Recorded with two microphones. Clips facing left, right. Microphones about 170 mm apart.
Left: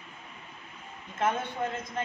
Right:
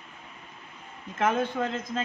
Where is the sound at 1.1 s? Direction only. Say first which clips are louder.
Right 4 dB; 90° right.